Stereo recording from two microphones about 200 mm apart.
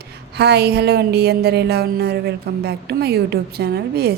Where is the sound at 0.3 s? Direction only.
55° right (ahead or behind).